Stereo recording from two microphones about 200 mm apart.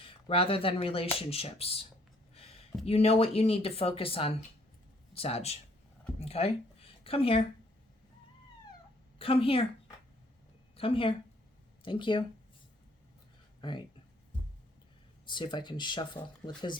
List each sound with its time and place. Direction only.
0.0 s speech: 25° left (ahead or behind)
2.3 s a sound: 30° left (ahead or behind)
2.8 s speech: 30° left (ahead or behind)
9.1 s speech: 30° left (ahead or behind)
10.8 s speech: 25° left (ahead or behind)
13.6 s speech: 25° left (ahead or behind)
15.3 s speech: 25° left (ahead or behind)